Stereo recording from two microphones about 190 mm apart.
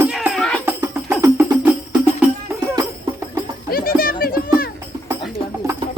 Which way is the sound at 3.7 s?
50° left (ahead or behind).